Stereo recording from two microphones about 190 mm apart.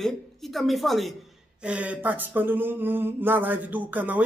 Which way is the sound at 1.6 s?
5° right (ahead or behind).